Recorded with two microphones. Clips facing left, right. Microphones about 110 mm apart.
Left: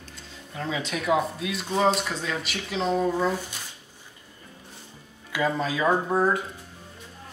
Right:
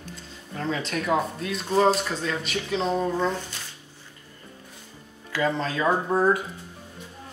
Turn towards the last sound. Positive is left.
turn(degrees=0)  # may be behind; listen again after turning